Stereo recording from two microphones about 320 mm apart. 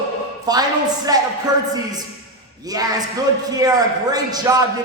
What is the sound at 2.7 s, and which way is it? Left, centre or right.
A man's voice, centre.